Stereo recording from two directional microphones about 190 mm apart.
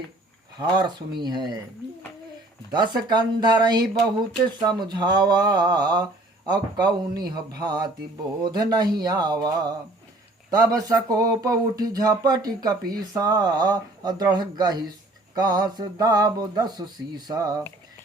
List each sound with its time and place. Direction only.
0.6 s speech: 25° right (ahead or behind)
2.7 s speech: 25° right (ahead or behind)